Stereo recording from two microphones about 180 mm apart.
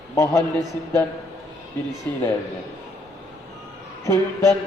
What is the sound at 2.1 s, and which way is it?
Speech, 10° left (ahead or behind).